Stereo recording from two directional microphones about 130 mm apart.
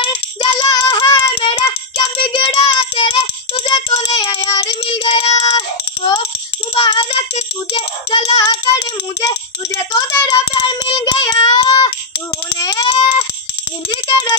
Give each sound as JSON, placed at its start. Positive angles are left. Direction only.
{"t": 0.0, "sound": "child singing", "side_deg": 40}
{"t": 4.8, "sound": "child singing", "side_deg": 45}
{"t": 5.4, "sound": "child singing", "side_deg": 30}
{"t": 8.4, "sound": "child singing", "side_deg": 30}
{"t": 12.5, "sound": "a sound", "side_deg": 30}